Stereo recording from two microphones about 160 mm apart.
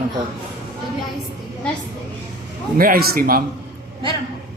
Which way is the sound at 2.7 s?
65° right (ahead or behind).